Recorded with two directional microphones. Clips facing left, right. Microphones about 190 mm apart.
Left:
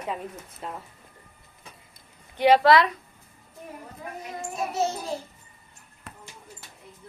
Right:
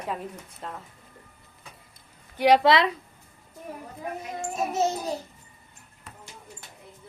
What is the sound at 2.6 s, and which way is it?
Speech, 25° right (ahead or behind).